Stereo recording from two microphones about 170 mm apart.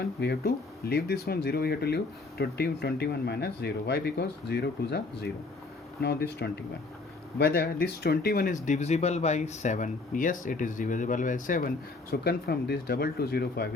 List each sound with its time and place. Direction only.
0.0 s speech: 70° left (ahead or behind); by 11.7 s 50° left (ahead or behind)
12.1 s speech: 70° left (ahead or behind)